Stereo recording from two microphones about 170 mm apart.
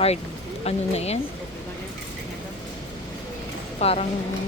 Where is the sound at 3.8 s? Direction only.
35° left (ahead or behind).